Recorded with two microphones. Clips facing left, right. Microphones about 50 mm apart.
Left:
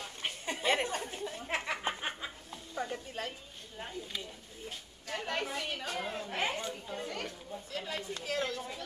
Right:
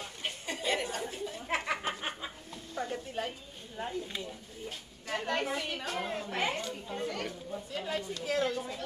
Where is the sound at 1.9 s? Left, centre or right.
Left.